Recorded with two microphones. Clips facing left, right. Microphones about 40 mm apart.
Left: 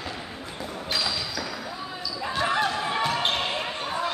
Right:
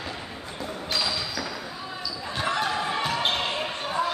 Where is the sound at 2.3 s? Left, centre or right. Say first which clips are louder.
Left 2 dB; centre.